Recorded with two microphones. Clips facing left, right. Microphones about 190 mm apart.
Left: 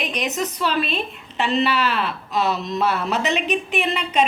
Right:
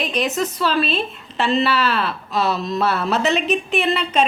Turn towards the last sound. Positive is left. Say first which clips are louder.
# right 2 dB
turn(degrees=15)  # may be behind; listen again after turning